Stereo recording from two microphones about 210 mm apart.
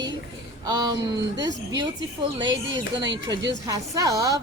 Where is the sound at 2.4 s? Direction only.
20° right (ahead or behind).